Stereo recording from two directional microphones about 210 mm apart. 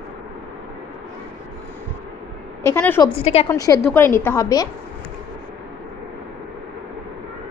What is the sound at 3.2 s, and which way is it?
Speech, 30° left (ahead or behind).